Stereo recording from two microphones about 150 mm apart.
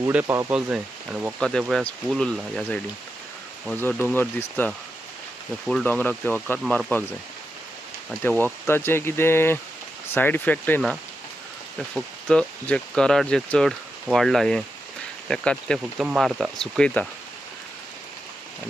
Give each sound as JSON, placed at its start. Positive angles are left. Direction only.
{"t": 0.3, "sound": "speech", "side_deg": -20}
{"t": 1.4, "sound": "speech", "side_deg": 5}
{"t": 8.2, "sound": "speech", "side_deg": 10}
{"t": 11.9, "sound": "speech", "side_deg": 5}